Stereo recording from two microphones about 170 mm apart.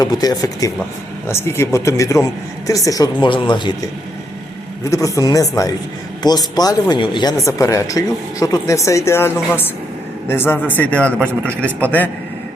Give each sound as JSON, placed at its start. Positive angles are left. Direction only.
{"t": 0.0, "sound": "speech", "side_deg": 20}
{"t": 4.9, "sound": "speech", "side_deg": 20}